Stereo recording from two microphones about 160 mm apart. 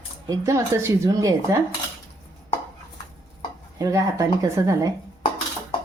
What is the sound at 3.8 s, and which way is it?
Speech, 20° right (ahead or behind).